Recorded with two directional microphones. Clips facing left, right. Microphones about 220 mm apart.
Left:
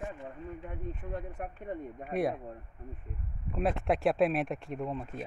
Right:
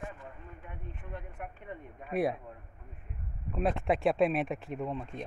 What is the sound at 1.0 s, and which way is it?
Speech, 40° left (ahead or behind).